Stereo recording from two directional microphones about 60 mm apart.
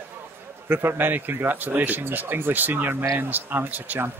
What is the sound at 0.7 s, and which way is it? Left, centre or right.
Speech, right.